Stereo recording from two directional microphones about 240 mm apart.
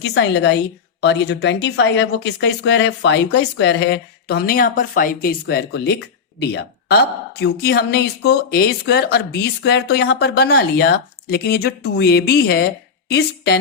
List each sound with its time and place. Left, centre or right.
0.0 s speech: left